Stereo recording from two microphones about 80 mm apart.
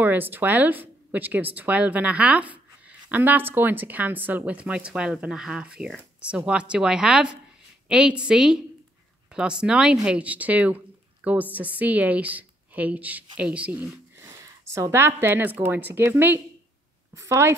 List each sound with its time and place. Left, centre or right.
0.0 s a woman's voice: right
14.1 s speech: right
17.1 s a woman's voice: right